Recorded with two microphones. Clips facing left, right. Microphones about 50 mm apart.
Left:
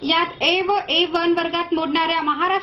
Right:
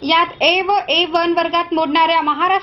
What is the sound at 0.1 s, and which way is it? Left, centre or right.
A woman's voice, right.